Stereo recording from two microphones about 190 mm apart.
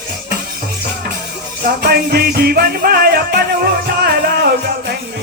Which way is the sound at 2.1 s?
55° right (ahead or behind).